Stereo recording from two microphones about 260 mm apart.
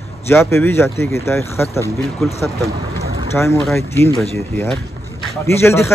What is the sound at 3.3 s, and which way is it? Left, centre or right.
Speech, centre.